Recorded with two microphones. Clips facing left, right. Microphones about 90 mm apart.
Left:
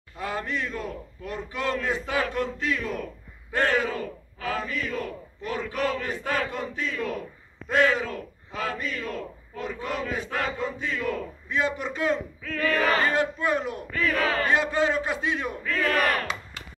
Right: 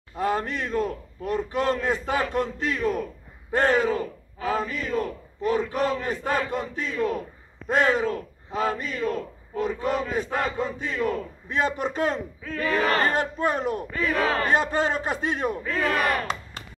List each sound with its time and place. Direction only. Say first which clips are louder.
0.1 s a man's voice: right 5 dB; 40° right (ahead or behind)
12.4 s speech: even; 25° right (ahead or behind)
12.9 s a man's voice: even; 45° right (ahead or behind)
13.9 s speech: even; 25° right (ahead or behind)
14.4 s a man's voice: right 1 dB; 40° right (ahead or behind)
15.6 s speech: right 1 dB; 25° right (ahead or behind)